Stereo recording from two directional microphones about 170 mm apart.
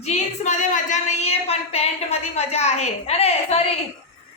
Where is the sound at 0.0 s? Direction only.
45° left (ahead or behind).